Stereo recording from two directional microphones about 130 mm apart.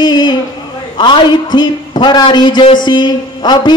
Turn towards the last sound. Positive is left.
turn(degrees=35)  # may be behind; listen again after turning